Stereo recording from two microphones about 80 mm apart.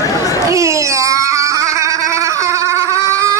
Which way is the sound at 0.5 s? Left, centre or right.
Right.